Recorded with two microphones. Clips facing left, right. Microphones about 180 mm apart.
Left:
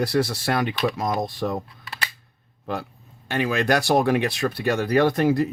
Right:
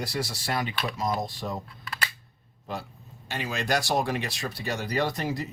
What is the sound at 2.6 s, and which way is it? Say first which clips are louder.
Speech: left 6 dB; 60° left (ahead or behind).